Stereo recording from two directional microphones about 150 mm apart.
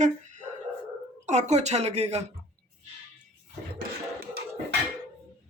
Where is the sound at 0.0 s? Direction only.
55° right (ahead or behind).